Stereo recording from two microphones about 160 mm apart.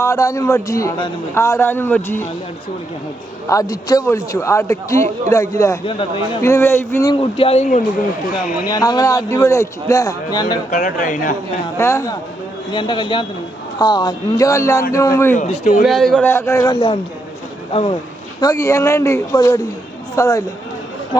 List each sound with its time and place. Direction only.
0.0 s a man's voice: 20° left (ahead or behind)
3.5 s a man's voice: 25° left (ahead or behind)
5.8 s speech: 35° left (ahead or behind)
6.4 s a man's voice: 15° left (ahead or behind)
7.1 s speech: 35° left (ahead or behind)
8.7 s a man's voice: 25° left (ahead or behind)
10.7 s speech: 55° left (ahead or behind)
11.8 s a man's voice: 20° left (ahead or behind)
12.7 s a man's voice: 30° left (ahead or behind)
15.4 s speech: 45° left (ahead or behind)
15.8 s speech: centre (ahead or behind)
16.2 s a man's voice: 15° left (ahead or behind)
17.7 s speech: 35° left (ahead or behind)
18.3 s a man's voice: 20° left (ahead or behind)